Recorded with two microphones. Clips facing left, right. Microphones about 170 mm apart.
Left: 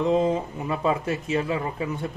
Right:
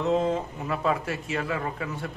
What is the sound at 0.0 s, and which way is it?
Speech, 15° left (ahead or behind).